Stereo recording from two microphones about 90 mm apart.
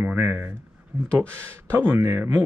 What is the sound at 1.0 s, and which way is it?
Speech, 10° left (ahead or behind).